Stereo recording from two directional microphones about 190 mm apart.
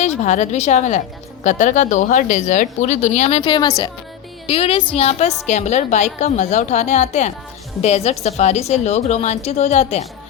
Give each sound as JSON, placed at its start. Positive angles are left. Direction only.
{"t": 0.0, "sound": "speech", "side_deg": 40}